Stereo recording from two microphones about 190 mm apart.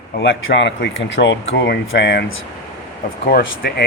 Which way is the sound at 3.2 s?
55° left (ahead or behind).